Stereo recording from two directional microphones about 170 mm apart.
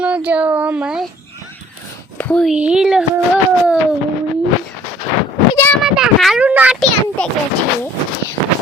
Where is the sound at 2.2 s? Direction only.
5° left (ahead or behind).